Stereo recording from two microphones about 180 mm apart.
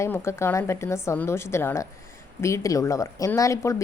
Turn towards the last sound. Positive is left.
turn(degrees=15)  # may be behind; listen again after turning